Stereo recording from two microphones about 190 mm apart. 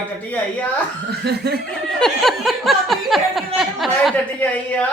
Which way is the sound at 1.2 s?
60° right (ahead or behind).